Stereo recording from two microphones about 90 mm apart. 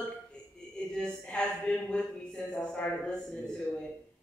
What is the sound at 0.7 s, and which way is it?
Speech, 10° left (ahead or behind).